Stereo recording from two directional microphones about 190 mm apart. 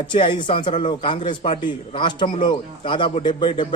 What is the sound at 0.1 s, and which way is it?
A man's voice, 25° left (ahead or behind).